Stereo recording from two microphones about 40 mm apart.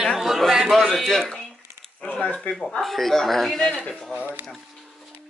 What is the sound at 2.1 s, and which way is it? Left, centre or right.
Speech, left.